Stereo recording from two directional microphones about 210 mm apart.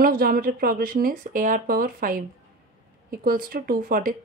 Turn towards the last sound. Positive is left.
turn(degrees=-40)  # may be behind; listen again after turning